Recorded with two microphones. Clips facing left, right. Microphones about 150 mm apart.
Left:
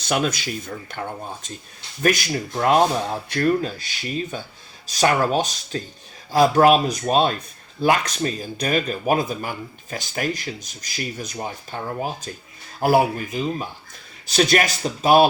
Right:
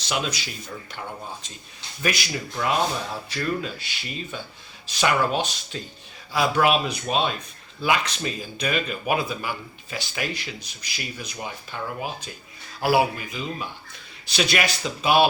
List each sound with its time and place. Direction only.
0.0 s speech: 50° left (ahead or behind)